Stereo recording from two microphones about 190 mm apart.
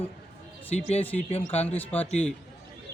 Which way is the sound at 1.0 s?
10° left (ahead or behind).